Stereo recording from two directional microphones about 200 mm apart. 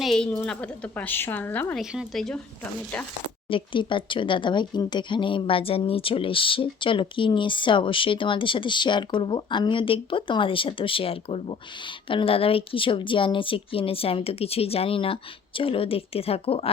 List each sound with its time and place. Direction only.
0.0 s a woman's voice: centre (ahead or behind)
1.8 s speech: 5° right (ahead or behind)
3.5 s speech: 25° left (ahead or behind)